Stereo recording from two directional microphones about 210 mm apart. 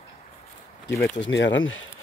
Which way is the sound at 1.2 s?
60° left (ahead or behind).